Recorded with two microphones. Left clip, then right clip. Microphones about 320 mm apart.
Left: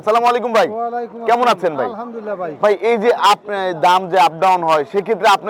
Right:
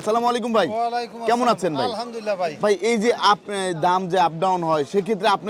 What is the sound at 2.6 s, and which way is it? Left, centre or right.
A man's voice, left.